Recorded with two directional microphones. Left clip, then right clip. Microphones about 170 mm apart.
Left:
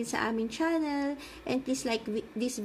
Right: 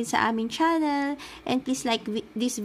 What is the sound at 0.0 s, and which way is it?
Speech, 50° right (ahead or behind).